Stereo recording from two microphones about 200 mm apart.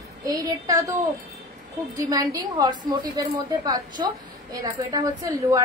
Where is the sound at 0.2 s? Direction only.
20° right (ahead or behind).